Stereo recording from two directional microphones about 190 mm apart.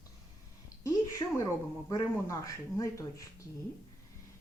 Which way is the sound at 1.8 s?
20° left (ahead or behind).